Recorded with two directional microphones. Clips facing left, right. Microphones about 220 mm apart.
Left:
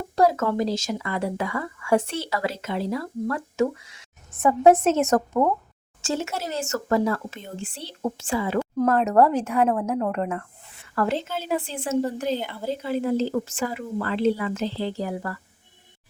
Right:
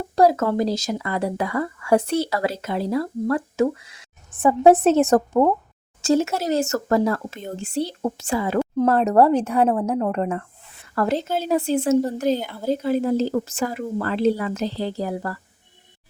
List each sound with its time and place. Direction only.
0.2 s speech: 35° right (ahead or behind)